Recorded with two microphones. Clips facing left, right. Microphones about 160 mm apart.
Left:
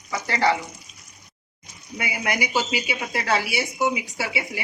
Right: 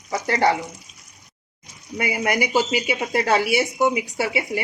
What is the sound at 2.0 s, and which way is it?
Speech, 45° right (ahead or behind).